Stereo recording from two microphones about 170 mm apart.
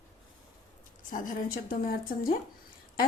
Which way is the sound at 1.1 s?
60° left (ahead or behind).